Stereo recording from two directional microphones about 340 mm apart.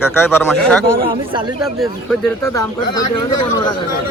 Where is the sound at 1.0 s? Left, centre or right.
Centre.